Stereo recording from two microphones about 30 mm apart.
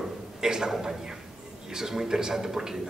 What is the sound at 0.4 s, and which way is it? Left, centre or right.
A man's voice, centre.